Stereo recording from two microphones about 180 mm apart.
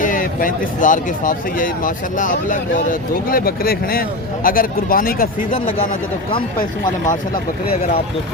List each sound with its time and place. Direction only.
0.0 s speech: 50° left (ahead or behind)